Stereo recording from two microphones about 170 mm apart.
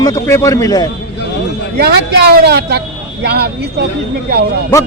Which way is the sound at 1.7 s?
70° right (ahead or behind).